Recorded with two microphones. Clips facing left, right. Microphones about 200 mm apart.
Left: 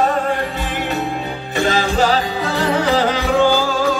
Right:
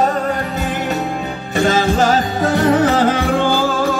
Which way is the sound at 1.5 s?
45° right (ahead or behind).